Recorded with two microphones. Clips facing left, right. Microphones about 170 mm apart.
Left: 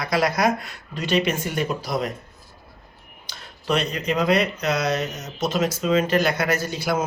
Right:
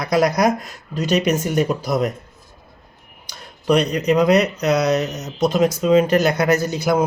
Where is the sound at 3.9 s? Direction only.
40° right (ahead or behind).